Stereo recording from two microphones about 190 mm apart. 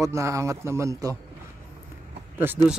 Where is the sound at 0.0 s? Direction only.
15° right (ahead or behind).